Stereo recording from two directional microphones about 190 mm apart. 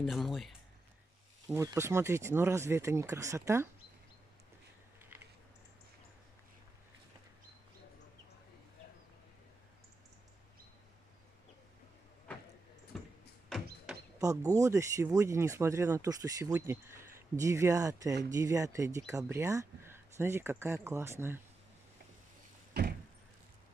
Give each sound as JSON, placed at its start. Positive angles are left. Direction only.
{"t": 0.0, "sound": "speech", "side_deg": 0}
{"t": 1.5, "sound": "speech", "side_deg": -15}
{"t": 12.9, "sound": "music", "side_deg": 0}
{"t": 13.5, "sound": "door", "side_deg": 0}
{"t": 13.9, "sound": "a sound", "side_deg": -5}
{"t": 14.2, "sound": "speech", "side_deg": -15}